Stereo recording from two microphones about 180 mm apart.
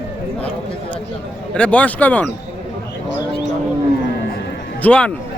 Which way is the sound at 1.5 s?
5° left (ahead or behind).